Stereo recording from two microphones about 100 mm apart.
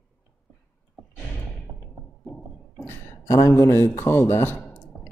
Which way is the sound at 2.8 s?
20° left (ahead or behind).